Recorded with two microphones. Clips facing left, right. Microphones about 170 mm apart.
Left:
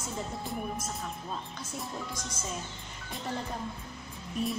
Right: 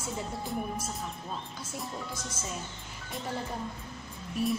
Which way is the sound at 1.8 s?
5° right (ahead or behind).